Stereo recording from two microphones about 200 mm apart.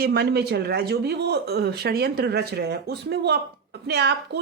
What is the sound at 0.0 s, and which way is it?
Speech, 50° right (ahead or behind).